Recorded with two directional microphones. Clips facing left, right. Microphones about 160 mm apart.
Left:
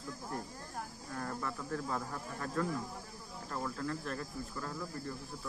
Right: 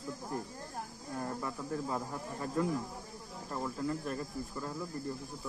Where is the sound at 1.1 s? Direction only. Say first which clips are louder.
Right 2 dB; 15° right (ahead or behind).